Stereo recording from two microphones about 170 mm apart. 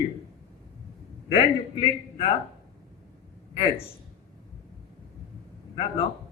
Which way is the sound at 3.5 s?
30° left (ahead or behind).